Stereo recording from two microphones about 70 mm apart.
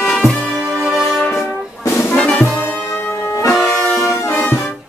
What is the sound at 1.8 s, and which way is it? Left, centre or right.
Music, left.